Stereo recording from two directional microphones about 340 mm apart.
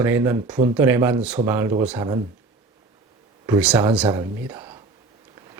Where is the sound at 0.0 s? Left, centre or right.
Centre.